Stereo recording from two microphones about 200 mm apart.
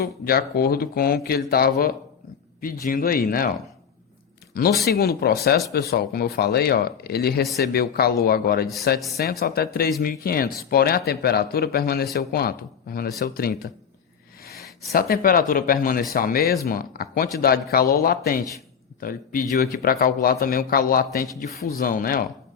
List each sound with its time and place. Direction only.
0.0 s speech: 50° left (ahead or behind)
4.8 s speech: 50° left (ahead or behind)
14.9 s speech: 50° left (ahead or behind)